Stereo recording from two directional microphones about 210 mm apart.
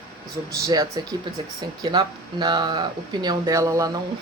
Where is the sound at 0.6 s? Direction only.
15° right (ahead or behind).